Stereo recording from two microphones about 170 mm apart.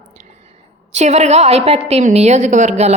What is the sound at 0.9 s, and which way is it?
A woman's voice, 40° right (ahead or behind).